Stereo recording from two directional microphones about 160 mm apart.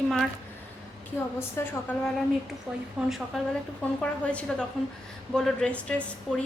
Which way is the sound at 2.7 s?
Centre (ahead or behind).